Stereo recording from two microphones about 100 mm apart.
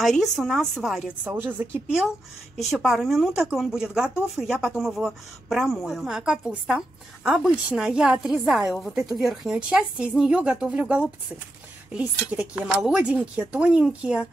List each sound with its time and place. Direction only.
0.0 s a woman's voice: centre (ahead or behind)
1.2 s a woman's voice: 15° right (ahead or behind)